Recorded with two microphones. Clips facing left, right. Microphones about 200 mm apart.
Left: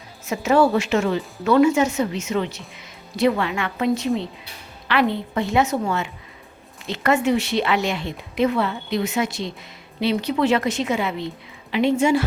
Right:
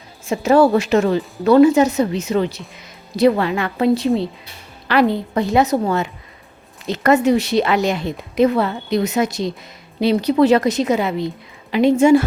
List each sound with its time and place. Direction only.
0.3 s a woman's voice: 35° right (ahead or behind)